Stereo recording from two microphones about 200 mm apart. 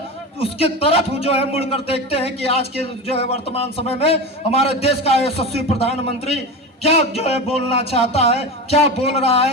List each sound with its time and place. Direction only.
0.3 s a man's voice: 30° left (ahead or behind)